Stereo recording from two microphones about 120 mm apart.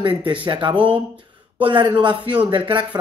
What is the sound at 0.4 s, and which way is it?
Speech, 40° right (ahead or behind).